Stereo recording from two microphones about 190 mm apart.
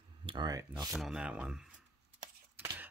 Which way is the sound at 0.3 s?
20° right (ahead or behind).